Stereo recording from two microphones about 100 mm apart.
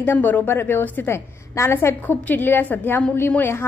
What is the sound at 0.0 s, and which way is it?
A woman's voice, 20° left (ahead or behind).